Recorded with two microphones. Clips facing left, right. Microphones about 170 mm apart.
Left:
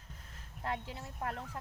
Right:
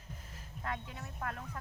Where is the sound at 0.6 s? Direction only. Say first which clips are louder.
Left 2 dB; 30° left (ahead or behind).